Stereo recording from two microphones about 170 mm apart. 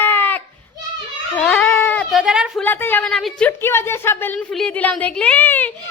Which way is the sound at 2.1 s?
5° right (ahead or behind).